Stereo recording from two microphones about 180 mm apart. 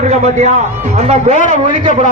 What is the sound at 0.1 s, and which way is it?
A man's voice, 40° right (ahead or behind).